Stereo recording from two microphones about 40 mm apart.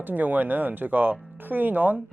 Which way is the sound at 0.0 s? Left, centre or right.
Right.